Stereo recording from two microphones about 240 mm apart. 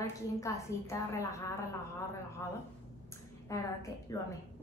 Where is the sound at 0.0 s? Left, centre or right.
Centre.